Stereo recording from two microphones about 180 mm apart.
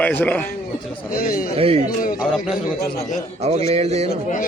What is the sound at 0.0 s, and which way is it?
Speech, 10° left (ahead or behind).